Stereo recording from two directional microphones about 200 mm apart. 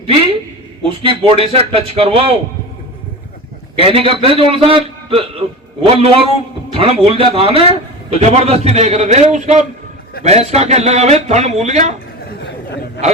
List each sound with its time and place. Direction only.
0.9 s a man's voice: 25° right (ahead or behind)
3.8 s a man's voice: 25° right (ahead or behind)